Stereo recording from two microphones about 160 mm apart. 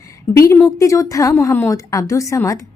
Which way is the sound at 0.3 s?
20° left (ahead or behind).